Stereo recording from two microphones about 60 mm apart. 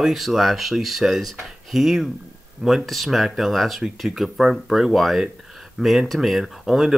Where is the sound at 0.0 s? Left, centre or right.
Centre.